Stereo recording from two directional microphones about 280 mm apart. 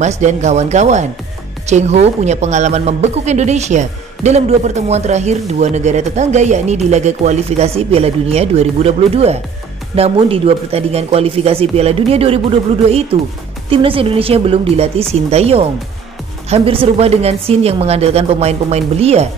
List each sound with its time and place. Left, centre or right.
0.0 s speech: right